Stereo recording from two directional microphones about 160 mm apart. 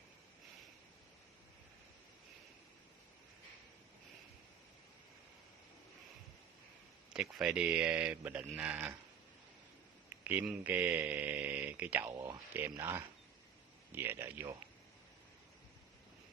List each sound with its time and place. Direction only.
7.1 s speech: 5° right (ahead or behind)
10.1 s speech: 10° right (ahead or behind)